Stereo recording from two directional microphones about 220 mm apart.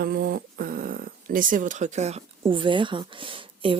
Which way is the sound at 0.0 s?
45° right (ahead or behind).